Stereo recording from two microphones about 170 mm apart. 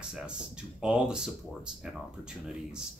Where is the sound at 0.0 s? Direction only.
5° right (ahead or behind).